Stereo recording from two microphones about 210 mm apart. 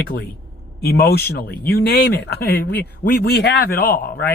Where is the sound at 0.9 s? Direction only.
45° left (ahead or behind).